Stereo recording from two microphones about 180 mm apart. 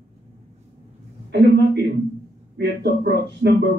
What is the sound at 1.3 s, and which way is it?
Speech, 65° right (ahead or behind).